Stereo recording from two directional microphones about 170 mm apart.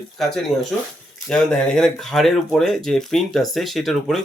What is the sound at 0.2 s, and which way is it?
Speech, centre (ahead or behind).